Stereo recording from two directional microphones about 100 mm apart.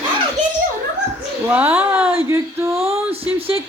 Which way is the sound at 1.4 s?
20° right (ahead or behind).